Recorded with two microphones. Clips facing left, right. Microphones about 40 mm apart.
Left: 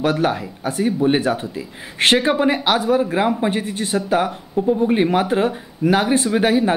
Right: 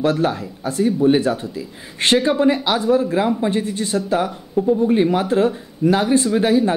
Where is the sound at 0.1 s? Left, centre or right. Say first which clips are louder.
Even; left.